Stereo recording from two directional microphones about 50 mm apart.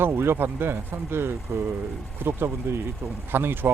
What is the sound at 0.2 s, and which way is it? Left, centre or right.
Speech, right.